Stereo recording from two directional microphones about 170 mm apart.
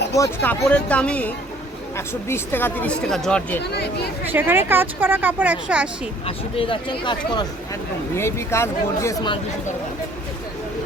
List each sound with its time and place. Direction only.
0.1 s speech: 20° left (ahead or behind)
0.7 s speech: 10° left (ahead or behind)
4.3 s speech: 10° right (ahead or behind)
6.2 s speech: 30° left (ahead or behind)
8.1 s speech: 15° left (ahead or behind)